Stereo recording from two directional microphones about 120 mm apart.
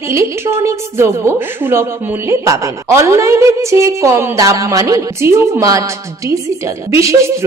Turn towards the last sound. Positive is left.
turn(degrees=-25)  # may be behind; listen again after turning